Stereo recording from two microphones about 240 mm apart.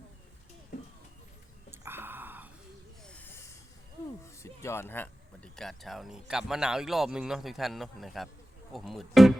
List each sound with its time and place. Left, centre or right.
0.7 s a sound: left
1.7 s whispering: centre
3.1 s snake: centre
4.4 s speech: centre